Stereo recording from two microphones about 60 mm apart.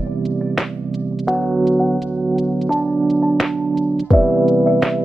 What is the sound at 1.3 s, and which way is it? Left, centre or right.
Music, centre.